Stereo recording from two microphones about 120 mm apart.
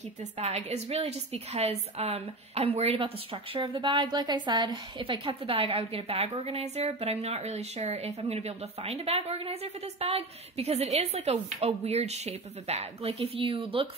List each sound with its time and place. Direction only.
0.2 s a woman's voice: 65° right (ahead or behind); by 13.8 s 50° right (ahead or behind)